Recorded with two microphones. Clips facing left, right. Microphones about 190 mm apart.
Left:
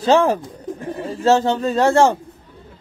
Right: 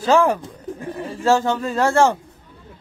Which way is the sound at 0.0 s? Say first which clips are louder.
Left 1 dB; 25° left (ahead or behind).